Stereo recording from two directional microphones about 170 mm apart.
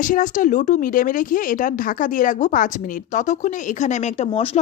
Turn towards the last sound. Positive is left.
turn(degrees=35)  # may be behind; listen again after turning